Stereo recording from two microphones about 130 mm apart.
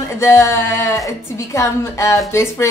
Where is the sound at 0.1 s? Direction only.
20° left (ahead or behind).